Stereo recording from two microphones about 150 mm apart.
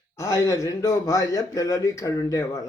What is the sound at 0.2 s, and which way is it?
A man's voice, 20° left (ahead or behind).